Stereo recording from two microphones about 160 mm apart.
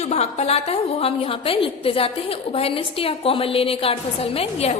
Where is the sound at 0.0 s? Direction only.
45° left (ahead or behind).